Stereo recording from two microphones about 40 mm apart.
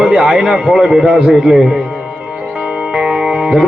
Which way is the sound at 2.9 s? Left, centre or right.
Right.